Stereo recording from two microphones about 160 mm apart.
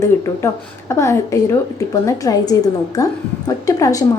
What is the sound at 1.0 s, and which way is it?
A woman's voice, 20° left (ahead or behind).